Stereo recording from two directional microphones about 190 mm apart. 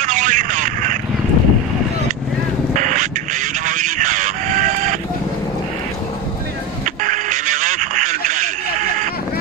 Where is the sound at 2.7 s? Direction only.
40° right (ahead or behind).